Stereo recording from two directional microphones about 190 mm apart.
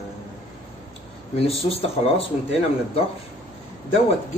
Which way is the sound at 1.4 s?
30° left (ahead or behind).